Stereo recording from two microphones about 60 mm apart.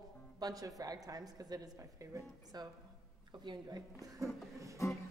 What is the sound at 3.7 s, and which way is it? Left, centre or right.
Speech, right.